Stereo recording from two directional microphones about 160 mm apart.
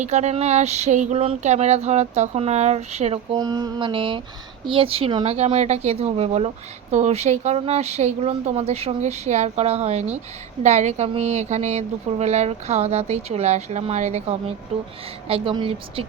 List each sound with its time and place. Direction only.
0.0 s speech: 45° right (ahead or behind)
3.3 s mantra: 25° right (ahead or behind)
4.6 s speech: 35° right (ahead or behind)